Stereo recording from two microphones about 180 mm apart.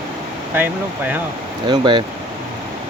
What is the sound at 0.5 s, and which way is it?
Speech, 10° right (ahead or behind).